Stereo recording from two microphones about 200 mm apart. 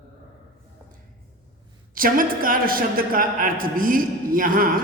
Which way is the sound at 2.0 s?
45° right (ahead or behind).